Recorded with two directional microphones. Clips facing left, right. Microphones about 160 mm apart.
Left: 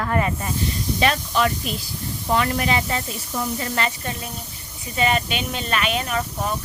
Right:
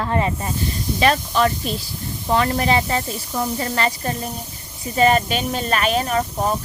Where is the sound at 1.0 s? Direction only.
40° right (ahead or behind).